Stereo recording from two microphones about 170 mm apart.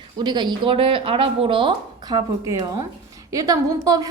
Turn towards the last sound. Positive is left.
turn(degrees=-20)  # may be behind; listen again after turning